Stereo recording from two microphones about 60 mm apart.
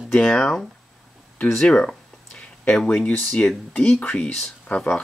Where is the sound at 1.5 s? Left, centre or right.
Centre.